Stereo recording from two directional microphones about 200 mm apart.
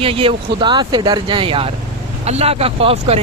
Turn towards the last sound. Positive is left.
turn(degrees=-30)  # may be behind; listen again after turning